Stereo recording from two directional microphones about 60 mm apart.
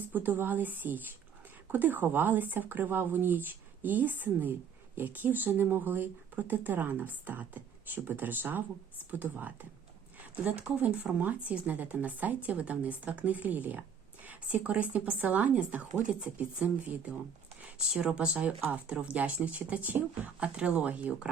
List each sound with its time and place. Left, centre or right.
0.1 s speech: right
17.9 s speech: centre